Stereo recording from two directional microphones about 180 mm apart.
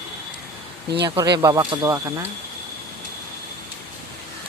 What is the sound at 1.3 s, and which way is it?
Speech, 20° right (ahead or behind).